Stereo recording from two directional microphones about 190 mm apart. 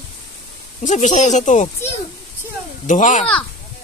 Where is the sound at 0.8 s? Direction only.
40° left (ahead or behind).